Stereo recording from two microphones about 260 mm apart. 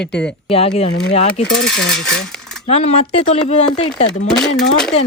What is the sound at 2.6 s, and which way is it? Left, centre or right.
Speech, left.